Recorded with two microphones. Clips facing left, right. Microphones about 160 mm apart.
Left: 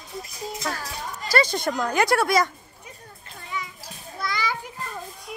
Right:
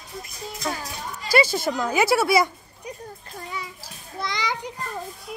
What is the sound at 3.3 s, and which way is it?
Children playing, 35° right (ahead or behind).